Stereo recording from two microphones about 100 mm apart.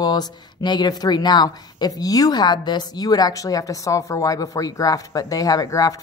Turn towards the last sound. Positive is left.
turn(degrees=35)  # may be behind; listen again after turning